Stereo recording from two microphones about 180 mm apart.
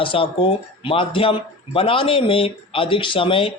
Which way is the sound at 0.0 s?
30° left (ahead or behind).